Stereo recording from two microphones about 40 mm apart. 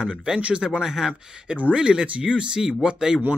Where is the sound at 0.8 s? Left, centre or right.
Centre.